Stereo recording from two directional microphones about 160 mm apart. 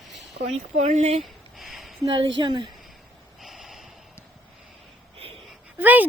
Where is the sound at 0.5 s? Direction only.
45° right (ahead or behind).